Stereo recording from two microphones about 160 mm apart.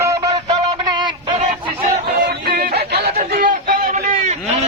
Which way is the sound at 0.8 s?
25° right (ahead or behind).